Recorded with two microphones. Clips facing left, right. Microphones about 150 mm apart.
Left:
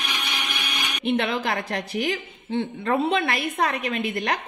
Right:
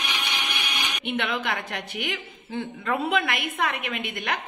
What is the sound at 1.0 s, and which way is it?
A woman's voice, 35° left (ahead or behind).